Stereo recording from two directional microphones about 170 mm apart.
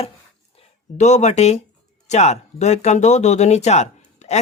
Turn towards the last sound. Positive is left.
turn(degrees=40)  # may be behind; listen again after turning